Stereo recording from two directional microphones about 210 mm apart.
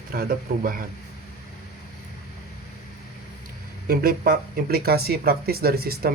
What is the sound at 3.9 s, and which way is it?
Speech, 45° right (ahead or behind).